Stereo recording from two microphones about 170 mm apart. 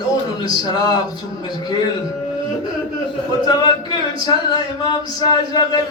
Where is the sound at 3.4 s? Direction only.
25° left (ahead or behind).